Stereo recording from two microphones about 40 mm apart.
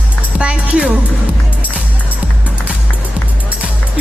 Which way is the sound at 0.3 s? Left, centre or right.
Right.